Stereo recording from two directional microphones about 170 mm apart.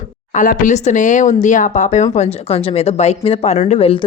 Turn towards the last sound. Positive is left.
turn(degrees=35)  # may be behind; listen again after turning